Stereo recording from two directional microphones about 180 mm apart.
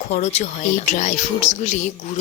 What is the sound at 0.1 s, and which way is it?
Speech, 40° left (ahead or behind).